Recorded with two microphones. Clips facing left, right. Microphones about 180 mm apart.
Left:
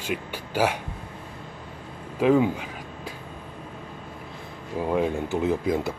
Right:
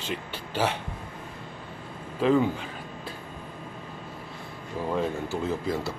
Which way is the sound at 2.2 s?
10° left (ahead or behind).